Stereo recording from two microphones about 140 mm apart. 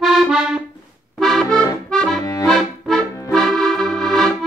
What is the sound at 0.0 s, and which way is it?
Accordion, centre (ahead or behind).